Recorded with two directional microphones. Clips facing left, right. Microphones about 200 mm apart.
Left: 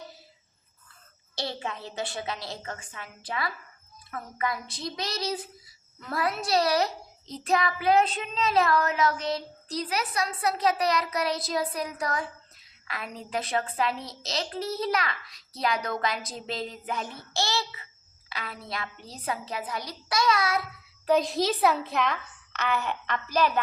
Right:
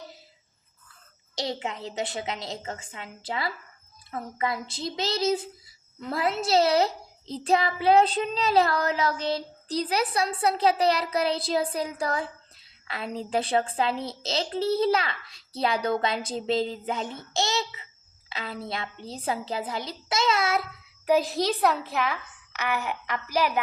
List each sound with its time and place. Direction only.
1.5 s a child's voice: 20° right (ahead or behind)
21.1 s a child's voice: 5° right (ahead or behind)